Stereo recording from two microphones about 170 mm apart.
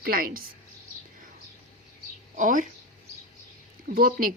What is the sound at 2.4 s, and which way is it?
Speech, 50° right (ahead or behind).